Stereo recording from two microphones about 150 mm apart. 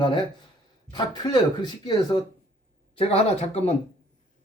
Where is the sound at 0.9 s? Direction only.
30° left (ahead or behind).